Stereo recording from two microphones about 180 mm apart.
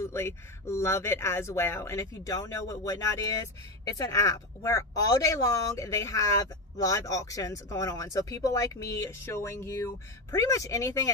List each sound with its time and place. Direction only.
0.0 s speech: 15° left (ahead or behind)